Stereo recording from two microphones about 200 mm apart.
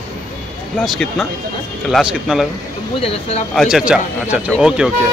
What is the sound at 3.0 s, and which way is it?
Speech, 30° left (ahead or behind).